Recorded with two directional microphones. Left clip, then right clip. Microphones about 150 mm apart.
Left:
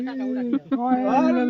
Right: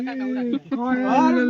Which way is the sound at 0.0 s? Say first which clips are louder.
Right 1 dB; 90° right.